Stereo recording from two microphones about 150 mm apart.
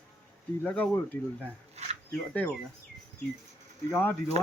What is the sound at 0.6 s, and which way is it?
Speech, 10° left (ahead or behind).